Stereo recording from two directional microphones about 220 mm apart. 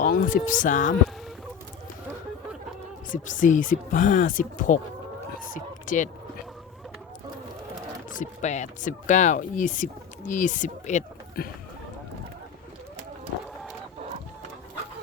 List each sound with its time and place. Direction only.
0.0 s speech: 35° left (ahead or behind)
3.2 s speech: 35° left (ahead or behind)
5.5 s a sound: 35° left (ahead or behind)
8.1 s speech: 35° left (ahead or behind)